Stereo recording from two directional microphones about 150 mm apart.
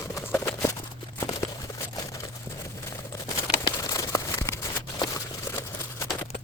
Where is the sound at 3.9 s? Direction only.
20° left (ahead or behind).